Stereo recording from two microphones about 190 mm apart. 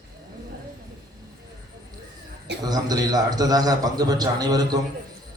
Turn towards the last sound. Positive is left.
turn(degrees=-20)  # may be behind; listen again after turning